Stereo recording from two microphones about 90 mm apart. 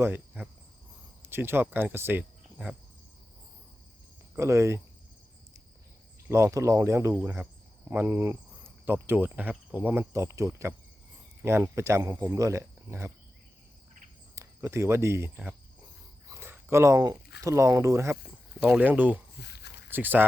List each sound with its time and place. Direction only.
0.4 s cricket: 20° right (ahead or behind)
1.2 s speech: 25° right (ahead or behind)
4.4 s speech: 35° right (ahead or behind)
6.3 s speech: 30° right (ahead or behind)
14.3 s speech: 35° right (ahead or behind)
16.3 s speech: 25° right (ahead or behind)
18.3 s speech: 15° right (ahead or behind)